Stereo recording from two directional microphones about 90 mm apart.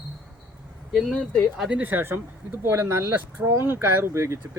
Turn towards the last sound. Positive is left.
turn(degrees=-30)  # may be behind; listen again after turning